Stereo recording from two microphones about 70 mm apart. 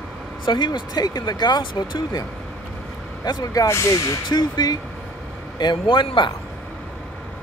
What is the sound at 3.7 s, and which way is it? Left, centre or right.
Speech, left.